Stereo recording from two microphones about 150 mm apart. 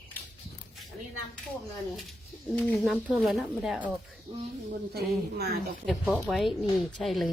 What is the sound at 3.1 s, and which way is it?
Speech, centre (ahead or behind).